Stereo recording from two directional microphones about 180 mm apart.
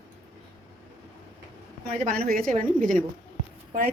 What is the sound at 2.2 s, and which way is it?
Speech, 50° right (ahead or behind).